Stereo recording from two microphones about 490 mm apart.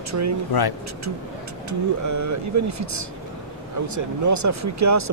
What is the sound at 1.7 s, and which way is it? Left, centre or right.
Speech, right.